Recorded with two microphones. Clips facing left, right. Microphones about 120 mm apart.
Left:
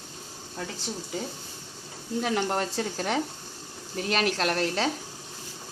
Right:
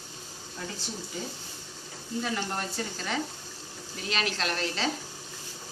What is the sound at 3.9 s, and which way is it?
Speech, 55° left (ahead or behind).